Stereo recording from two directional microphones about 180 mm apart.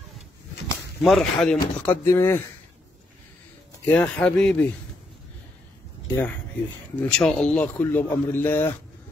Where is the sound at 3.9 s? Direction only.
10° left (ahead or behind).